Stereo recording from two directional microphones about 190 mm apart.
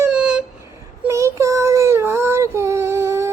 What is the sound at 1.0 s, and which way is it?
Child singing, 15° right (ahead or behind).